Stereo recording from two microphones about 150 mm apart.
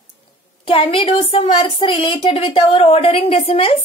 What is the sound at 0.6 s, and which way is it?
A woman's voice, 40° left (ahead or behind).